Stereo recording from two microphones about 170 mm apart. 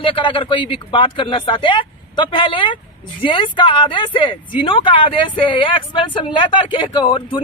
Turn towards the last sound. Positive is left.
turn(degrees=30)  # may be behind; listen again after turning